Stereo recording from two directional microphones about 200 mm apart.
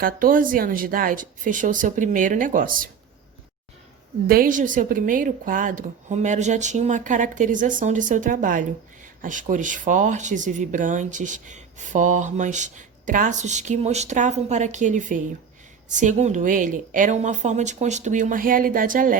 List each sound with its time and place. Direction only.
0.0 s speech: 45° right (ahead or behind)
4.3 s speech: 45° right (ahead or behind)